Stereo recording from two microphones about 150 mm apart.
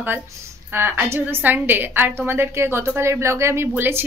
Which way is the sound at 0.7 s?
15° right (ahead or behind).